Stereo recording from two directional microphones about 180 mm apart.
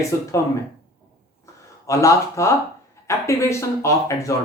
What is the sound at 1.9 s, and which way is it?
Speech, 15° left (ahead or behind).